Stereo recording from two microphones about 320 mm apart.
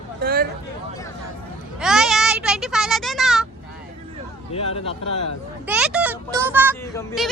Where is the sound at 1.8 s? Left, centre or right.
Centre.